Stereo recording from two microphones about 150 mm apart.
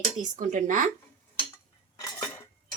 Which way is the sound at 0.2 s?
60° right (ahead or behind).